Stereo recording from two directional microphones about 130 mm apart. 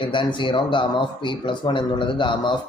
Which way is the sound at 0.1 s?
40° left (ahead or behind).